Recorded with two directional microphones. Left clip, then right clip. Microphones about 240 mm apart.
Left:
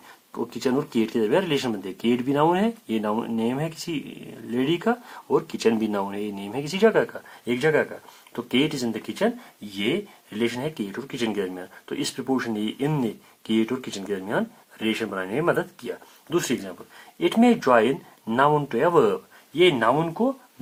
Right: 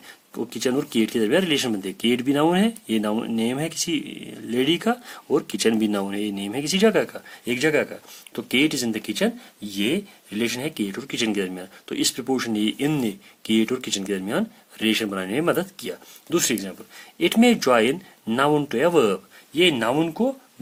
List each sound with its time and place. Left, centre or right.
0.3 s speech: right
9.7 s speech: right
10.8 s speech: right